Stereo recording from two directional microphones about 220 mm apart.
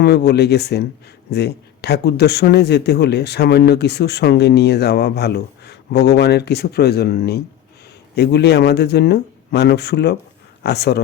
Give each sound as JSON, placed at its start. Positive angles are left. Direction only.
{"t": 0.0, "sound": "speech", "side_deg": 50}